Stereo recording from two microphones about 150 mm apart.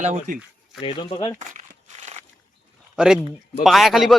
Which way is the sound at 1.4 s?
55° right (ahead or behind).